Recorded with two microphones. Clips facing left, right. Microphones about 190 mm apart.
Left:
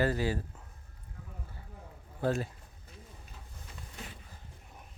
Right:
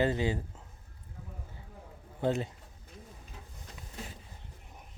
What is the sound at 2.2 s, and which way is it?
Speech, 20° right (ahead or behind).